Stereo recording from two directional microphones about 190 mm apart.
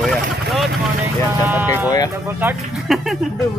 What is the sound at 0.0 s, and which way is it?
Vehicle, centre (ahead or behind).